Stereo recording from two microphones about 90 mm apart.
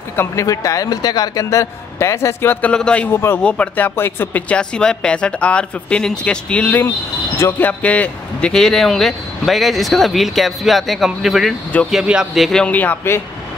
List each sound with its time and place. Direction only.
0.1 s speech: 25° left (ahead or behind)
0.5 s speech: 35° left (ahead or behind)
2.7 s speech: 10° left (ahead or behind)
3.1 s speech: 25° left (ahead or behind)
3.4 s speech: 15° left (ahead or behind)
7.3 s speech: 25° left (ahead or behind); by 12.4 s 5° right (ahead or behind)
12.6 s speech: 20° left (ahead or behind)